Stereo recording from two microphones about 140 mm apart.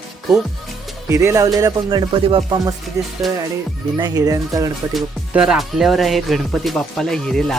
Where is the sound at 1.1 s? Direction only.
20° right (ahead or behind).